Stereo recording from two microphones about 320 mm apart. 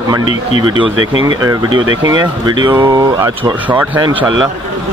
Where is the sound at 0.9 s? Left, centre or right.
Right.